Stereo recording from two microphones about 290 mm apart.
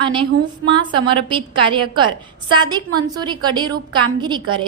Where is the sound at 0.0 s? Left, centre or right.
Centre.